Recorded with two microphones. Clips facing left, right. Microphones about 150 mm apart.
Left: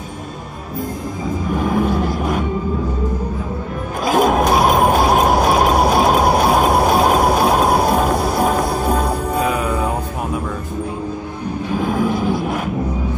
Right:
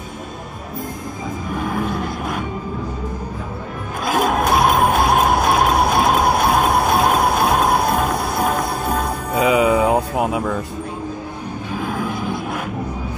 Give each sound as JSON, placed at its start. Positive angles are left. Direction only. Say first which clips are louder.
{"t": 1.6, "sound": "vehicle", "louder": "left 5 dB", "side_deg": 5}
{"t": 4.0, "sound": "a sound", "louder": "left 4 dB", "side_deg": 0}
{"t": 9.4, "sound": "music", "louder": "right 8 dB", "side_deg": -90}
{"t": 11.8, "sound": "vehicle", "louder": "left 6 dB", "side_deg": 0}